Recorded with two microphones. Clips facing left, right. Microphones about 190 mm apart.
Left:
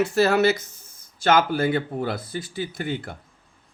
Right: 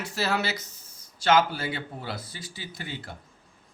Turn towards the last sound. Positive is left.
turn(degrees=55)  # may be behind; listen again after turning